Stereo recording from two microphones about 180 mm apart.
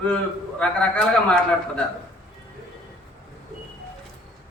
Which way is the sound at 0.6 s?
5° left (ahead or behind).